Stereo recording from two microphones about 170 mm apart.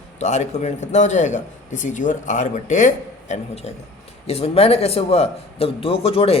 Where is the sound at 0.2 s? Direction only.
45° left (ahead or behind).